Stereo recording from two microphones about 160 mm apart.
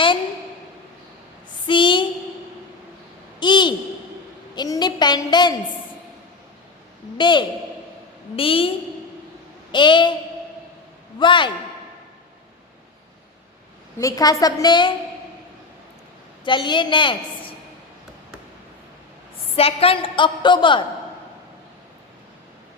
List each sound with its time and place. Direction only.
1.6 s a sound: 30° left (ahead or behind)
3.4 s a sound: 30° left (ahead or behind)
4.5 s a woman's voice: 25° left (ahead or behind)
7.2 s a woman's voice: 30° left (ahead or behind)
9.7 s a woman's voice: 30° left (ahead or behind)
11.2 s a woman's voice: 30° left (ahead or behind)
14.0 s a woman's voice: 20° left (ahead or behind)
16.4 s a woman's voice: 30° left (ahead or behind)
19.5 s a woman's voice: 35° left (ahead or behind)